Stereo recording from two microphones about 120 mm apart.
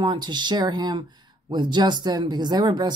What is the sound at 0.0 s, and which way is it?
Speech, 40° right (ahead or behind).